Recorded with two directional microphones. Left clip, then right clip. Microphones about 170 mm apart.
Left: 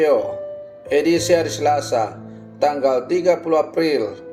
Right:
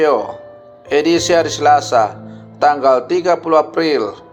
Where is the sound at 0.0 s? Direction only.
10° right (ahead or behind).